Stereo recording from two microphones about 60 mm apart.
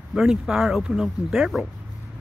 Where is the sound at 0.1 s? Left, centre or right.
Centre.